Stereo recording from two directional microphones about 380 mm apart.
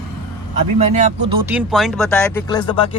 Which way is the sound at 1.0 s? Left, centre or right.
Centre.